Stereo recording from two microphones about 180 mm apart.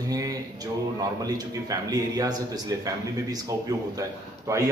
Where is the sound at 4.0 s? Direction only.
15° right (ahead or behind).